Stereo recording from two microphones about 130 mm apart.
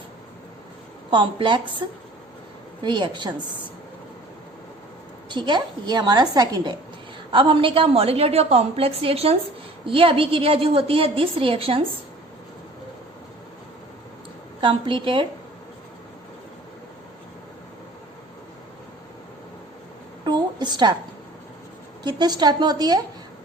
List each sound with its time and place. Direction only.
1.1 s a woman's voice: 40° right (ahead or behind)
2.8 s a woman's voice: 35° right (ahead or behind)
5.3 s a woman's voice: 35° right (ahead or behind)
14.6 s a woman's voice: 40° right (ahead or behind)
20.2 s a sound: 35° right (ahead or behind)
22.0 s a woman's voice: 35° right (ahead or behind)